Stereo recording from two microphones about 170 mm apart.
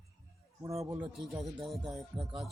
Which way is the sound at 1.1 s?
Centre (ahead or behind).